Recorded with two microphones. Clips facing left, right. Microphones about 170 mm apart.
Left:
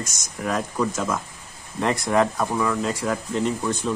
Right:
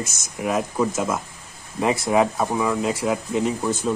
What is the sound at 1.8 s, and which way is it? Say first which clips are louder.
Speech: right 2 dB; 5° right (ahead or behind).